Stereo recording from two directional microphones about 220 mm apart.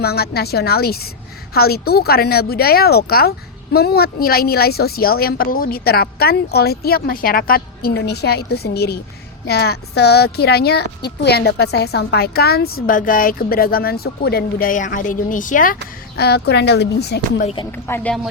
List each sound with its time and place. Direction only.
0.0 s a woman's voice: 45° left (ahead or behind)
17.4 s speech: 25° left (ahead or behind)
17.7 s speech: 10° left (ahead or behind)